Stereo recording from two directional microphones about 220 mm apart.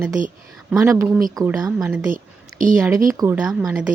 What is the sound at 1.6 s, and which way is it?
Speech, 5° right (ahead or behind).